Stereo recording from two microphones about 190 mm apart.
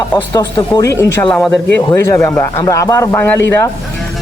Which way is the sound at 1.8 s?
20° left (ahead or behind).